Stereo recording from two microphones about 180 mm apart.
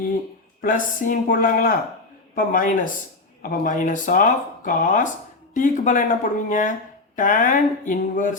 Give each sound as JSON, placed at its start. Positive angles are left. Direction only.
{"t": 0.6, "sound": "speech", "side_deg": 45}